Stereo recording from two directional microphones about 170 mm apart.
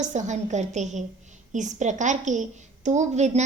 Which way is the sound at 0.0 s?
45° right (ahead or behind).